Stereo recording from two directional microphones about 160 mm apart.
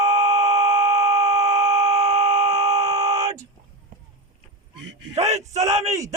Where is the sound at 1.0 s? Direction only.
45° right (ahead or behind).